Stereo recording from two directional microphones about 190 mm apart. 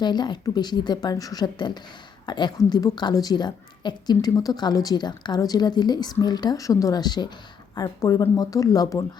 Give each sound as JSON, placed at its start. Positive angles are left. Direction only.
{"t": 0.0, "sound": "a woman's voice", "side_deg": 25}